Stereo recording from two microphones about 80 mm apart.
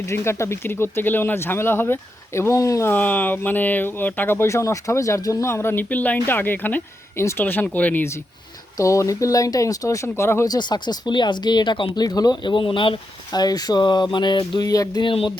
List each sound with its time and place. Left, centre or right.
0.0 s speech: left
2.8 s speech: left
8.8 s speech: left
10.6 s speech: left
12.0 s speech: left
14.7 s speech: left